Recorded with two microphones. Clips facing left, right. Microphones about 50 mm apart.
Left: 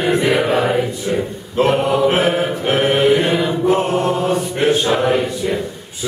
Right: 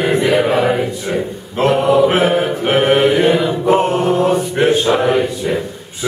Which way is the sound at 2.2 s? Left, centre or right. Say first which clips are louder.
Right 2 dB; right.